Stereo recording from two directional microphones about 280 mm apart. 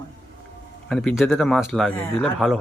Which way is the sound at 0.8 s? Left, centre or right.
Centre.